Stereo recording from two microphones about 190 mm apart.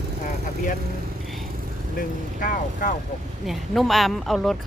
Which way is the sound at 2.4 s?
45° left (ahead or behind).